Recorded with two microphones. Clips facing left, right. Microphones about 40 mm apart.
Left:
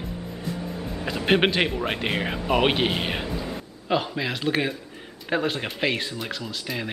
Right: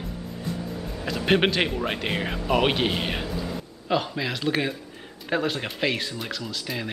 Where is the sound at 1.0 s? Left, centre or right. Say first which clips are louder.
Left 1 dB; centre.